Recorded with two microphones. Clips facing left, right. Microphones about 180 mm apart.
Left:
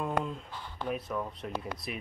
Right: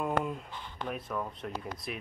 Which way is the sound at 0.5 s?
20° right (ahead or behind).